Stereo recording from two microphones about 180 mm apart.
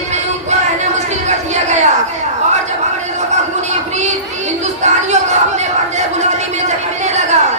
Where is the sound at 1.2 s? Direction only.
40° right (ahead or behind).